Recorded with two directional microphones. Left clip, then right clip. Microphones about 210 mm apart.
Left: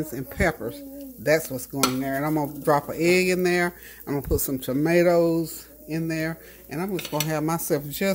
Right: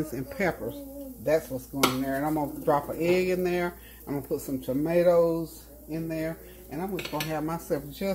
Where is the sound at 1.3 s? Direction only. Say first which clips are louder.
Left 4 dB; 45° left (ahead or behind).